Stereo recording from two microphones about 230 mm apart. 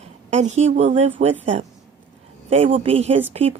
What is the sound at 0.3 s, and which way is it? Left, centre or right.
Speech, right.